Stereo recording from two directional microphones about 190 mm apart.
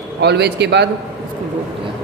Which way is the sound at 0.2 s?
60° right (ahead or behind).